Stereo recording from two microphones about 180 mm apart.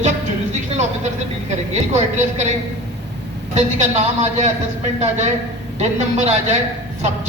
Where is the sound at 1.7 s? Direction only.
40° right (ahead or behind).